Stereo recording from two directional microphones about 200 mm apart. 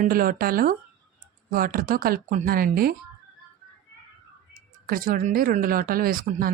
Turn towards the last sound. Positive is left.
turn(degrees=-45)  # may be behind; listen again after turning